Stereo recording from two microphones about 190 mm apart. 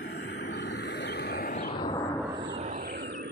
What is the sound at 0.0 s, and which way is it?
Vehicle, 60° left (ahead or behind).